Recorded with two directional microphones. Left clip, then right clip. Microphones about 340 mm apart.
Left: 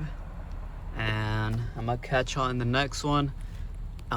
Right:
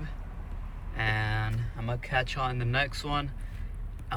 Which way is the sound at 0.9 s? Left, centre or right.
Centre.